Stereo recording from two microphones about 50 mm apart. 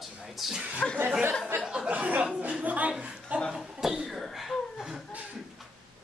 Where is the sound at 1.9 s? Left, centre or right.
Right.